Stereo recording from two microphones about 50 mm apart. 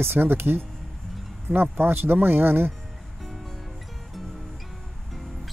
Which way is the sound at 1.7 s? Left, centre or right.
Right.